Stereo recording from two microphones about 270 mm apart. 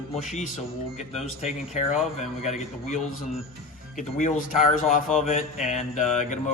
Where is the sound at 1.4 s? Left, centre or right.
Left.